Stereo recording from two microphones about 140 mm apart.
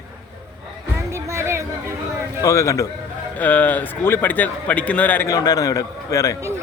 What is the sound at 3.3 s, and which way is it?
A man's voice, 10° left (ahead or behind).